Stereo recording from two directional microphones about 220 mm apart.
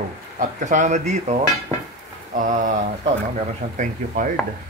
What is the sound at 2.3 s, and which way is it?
Speech, 35° right (ahead or behind).